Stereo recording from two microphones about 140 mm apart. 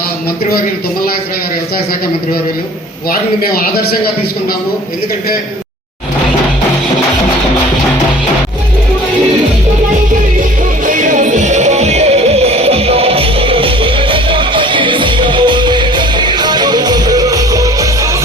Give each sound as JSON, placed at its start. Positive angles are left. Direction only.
{"t": 3.1, "sound": "a man's voice", "side_deg": 90}
{"t": 10.8, "sound": "music", "side_deg": -65}